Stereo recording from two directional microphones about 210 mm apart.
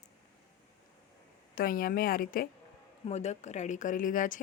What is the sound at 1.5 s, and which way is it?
Speech, 45° left (ahead or behind).